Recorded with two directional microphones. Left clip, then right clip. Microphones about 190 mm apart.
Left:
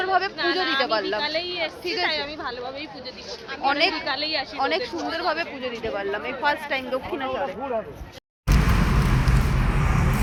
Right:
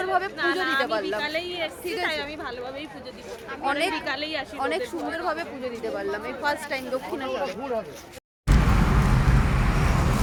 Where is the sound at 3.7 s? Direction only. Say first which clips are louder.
Left 3 dB; 5° right (ahead or behind).